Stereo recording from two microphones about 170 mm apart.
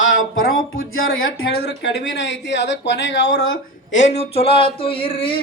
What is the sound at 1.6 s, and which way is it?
Speech, 85° left.